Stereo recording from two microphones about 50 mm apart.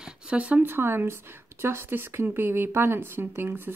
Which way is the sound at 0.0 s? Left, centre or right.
Right.